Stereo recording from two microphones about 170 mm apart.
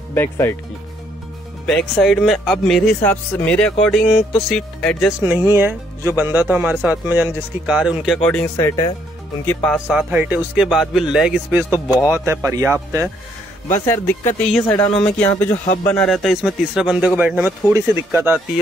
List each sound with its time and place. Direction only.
0.1 s speech: 15° left (ahead or behind)
1.7 s speech: centre (ahead or behind)
5.2 s speech: 15° right (ahead or behind); by 8.5 s 5° left (ahead or behind)
8.5 s speech: 20° left (ahead or behind)
9.5 s speech: 5° left (ahead or behind)
9.8 s speech: 5° right (ahead or behind)
13.8 s speech: 15° left (ahead or behind); by 18.4 s 10° right (ahead or behind)